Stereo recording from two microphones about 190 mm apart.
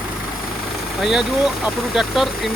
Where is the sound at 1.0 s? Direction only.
Centre (ahead or behind).